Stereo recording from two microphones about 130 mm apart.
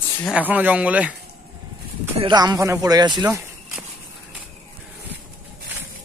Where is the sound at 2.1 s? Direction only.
35° right (ahead or behind).